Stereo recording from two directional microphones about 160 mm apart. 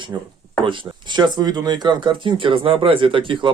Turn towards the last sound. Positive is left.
turn(degrees=-30)  # may be behind; listen again after turning